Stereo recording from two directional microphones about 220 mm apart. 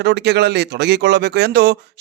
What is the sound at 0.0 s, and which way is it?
A man's voice, 50° right (ahead or behind).